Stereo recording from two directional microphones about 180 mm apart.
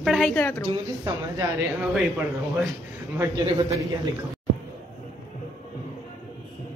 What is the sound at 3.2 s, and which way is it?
Speech, 15° right (ahead or behind).